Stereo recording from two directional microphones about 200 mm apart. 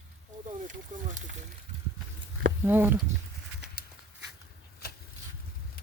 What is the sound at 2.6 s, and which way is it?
Speech, 10° right (ahead or behind).